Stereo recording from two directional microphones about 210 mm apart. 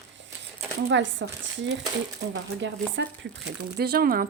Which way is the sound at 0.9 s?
60° right (ahead or behind).